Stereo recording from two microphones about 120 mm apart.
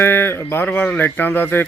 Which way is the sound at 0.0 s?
20° left (ahead or behind).